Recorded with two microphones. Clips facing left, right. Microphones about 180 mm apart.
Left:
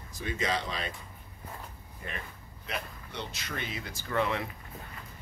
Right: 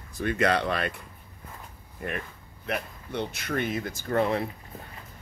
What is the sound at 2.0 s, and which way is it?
Speech, 60° right (ahead or behind).